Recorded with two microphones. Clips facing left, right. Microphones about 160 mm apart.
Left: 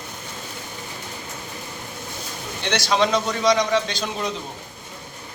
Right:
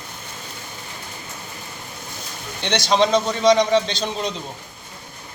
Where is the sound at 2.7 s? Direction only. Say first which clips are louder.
Right 3 dB; 20° right (ahead or behind).